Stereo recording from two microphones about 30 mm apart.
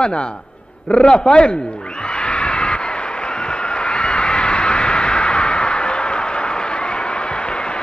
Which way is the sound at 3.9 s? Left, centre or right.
Left.